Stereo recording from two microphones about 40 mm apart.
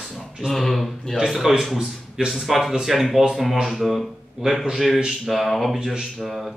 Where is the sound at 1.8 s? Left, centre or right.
Right.